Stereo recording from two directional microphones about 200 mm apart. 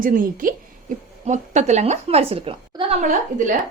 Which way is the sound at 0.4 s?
40° right (ahead or behind).